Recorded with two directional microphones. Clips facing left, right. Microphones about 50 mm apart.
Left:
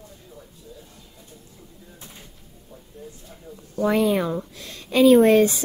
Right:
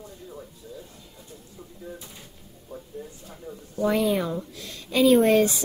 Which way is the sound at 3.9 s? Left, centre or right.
Left.